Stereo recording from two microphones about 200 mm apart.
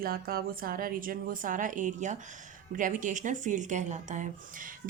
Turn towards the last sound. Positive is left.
turn(degrees=-40)  # may be behind; listen again after turning